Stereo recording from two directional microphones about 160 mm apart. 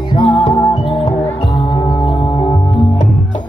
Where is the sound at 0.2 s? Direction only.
30° left (ahead or behind).